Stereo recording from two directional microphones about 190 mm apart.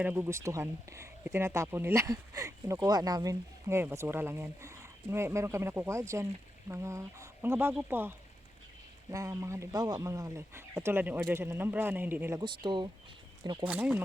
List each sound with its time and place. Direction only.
0.0 s speech: 10° right (ahead or behind)
12.4 s speech: 25° right (ahead or behind)
13.7 s speech: 5° right (ahead or behind)